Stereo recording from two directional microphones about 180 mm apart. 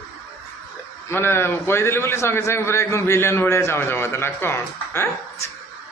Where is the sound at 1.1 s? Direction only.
15° left (ahead or behind).